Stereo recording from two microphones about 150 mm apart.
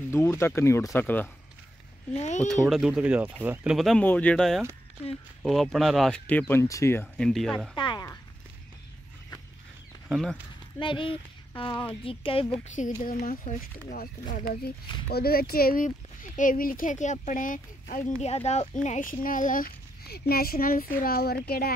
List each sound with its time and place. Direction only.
0.1 s speech: 15° left (ahead or behind)
2.1 s speech: 50° left (ahead or behind)
2.7 s speech: 5° right (ahead or behind)
4.0 s speech: 10° left (ahead or behind)
7.7 s speech: 30° left (ahead or behind)
10.8 s speech: 35° left (ahead or behind)
12.6 s speech: 55° left (ahead or behind)
18.2 s speech: 45° left (ahead or behind); by 21.7 s 90° left